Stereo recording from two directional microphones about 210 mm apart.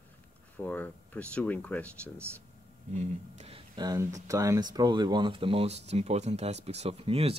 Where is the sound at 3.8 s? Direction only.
15° right (ahead or behind).